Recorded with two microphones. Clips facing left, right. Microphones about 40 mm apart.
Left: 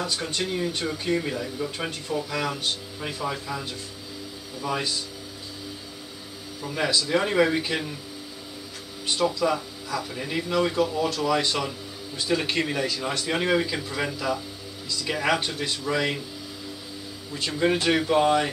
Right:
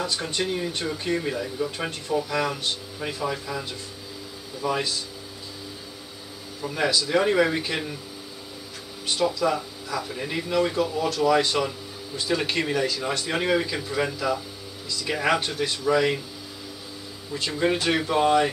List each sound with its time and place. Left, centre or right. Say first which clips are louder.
0.0 s speech: right 1 dB; centre
0.4 s speech: even; centre
4.6 s speech: right 2 dB; centre
6.6 s speech: right 1 dB; centre
9.2 s speech: even; centre
17.3 s speech: even; centre